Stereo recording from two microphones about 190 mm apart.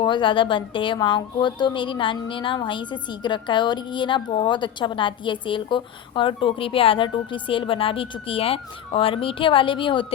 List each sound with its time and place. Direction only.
0.0 s a woman's voice: 25° left (ahead or behind)